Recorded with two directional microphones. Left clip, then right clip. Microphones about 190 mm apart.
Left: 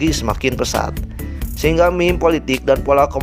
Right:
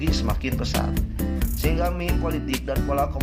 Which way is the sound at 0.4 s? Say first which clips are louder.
Left 9 dB; 50° left (ahead or behind).